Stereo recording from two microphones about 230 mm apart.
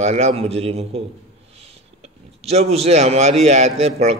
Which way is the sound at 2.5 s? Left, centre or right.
Right.